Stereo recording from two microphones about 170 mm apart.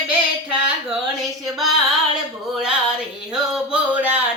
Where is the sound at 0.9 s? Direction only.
Centre (ahead or behind).